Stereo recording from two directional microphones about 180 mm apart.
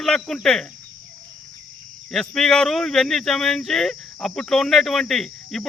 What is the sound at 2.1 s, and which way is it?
Speech, centre (ahead or behind).